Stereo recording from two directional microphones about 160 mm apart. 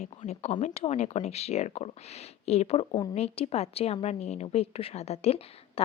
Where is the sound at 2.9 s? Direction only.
30° left (ahead or behind).